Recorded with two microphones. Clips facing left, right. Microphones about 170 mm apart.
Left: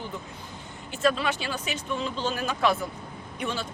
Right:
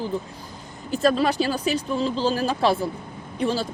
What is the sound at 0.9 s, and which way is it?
Speech, 40° right (ahead or behind).